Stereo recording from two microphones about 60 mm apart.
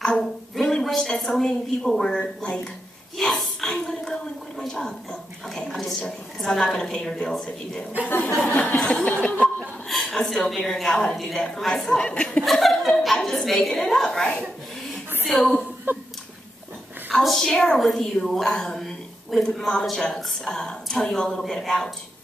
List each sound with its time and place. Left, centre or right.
0.0 s a woman's voice: centre
3.2 s a sound: centre
3.7 s a woman's voice: centre
9.2 s chuckle: left
9.6 s chuckle: centre
10.1 s a woman's voice: centre
12.4 s a woman's voice: centre
15.9 s a sound: right
17.2 s a woman's voice: centre